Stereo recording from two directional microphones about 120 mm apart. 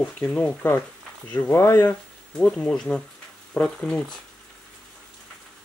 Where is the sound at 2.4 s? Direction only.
5° left (ahead or behind).